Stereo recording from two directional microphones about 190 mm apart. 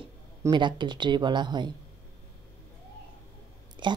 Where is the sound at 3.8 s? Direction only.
25° right (ahead or behind).